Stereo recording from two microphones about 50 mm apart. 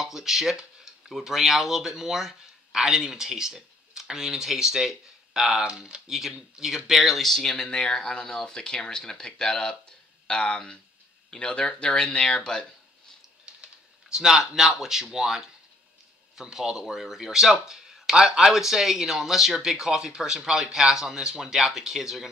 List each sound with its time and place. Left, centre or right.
0.0 s speech: centre
6.0 s speech: centre
13.5 s typing: centre
14.1 s speech: centre